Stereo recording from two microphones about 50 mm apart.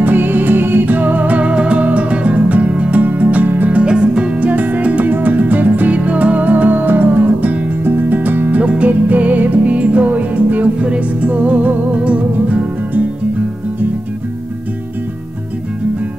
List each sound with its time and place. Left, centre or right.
0.0 s music: right
3.7 s music: centre